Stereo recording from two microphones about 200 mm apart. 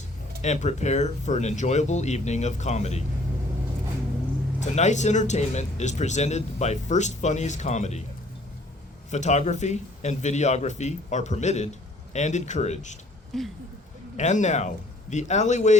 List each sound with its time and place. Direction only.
0.4 s a man's voice: 35° left (ahead or behind)
4.6 s a man's voice: 35° left (ahead or behind)
9.0 s a man's voice: 35° left (ahead or behind)
13.3 s speech: centre (ahead or behind)
14.2 s a man's voice: 35° left (ahead or behind)